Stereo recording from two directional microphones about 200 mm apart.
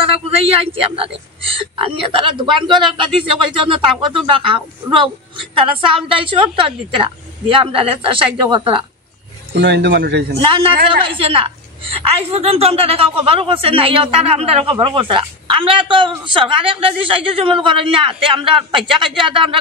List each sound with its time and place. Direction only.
0.0 s a man's voice: 30° right (ahead or behind)
9.5 s speech: 55° right (ahead or behind)
10.5 s a woman's voice: 25° right (ahead or behind)